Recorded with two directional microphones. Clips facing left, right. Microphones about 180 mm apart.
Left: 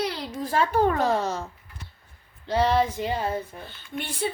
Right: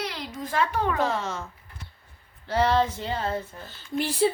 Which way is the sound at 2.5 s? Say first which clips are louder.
Left 1 dB; 15° left (ahead or behind).